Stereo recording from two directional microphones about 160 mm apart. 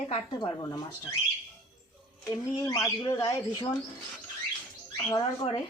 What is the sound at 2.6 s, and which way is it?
Speech, 20° left (ahead or behind).